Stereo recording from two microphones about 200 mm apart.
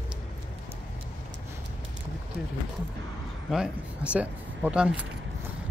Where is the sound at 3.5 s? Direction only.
5° right (ahead or behind).